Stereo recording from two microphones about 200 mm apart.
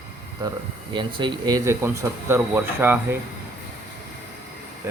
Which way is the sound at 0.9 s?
25° right (ahead or behind).